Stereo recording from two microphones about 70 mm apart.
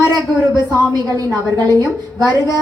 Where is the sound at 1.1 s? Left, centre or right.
Right.